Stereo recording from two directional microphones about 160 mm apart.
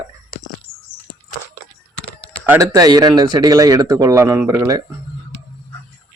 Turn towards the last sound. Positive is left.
turn(degrees=-20)  # may be behind; listen again after turning